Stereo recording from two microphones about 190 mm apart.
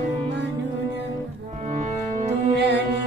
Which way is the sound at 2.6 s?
65° right (ahead or behind).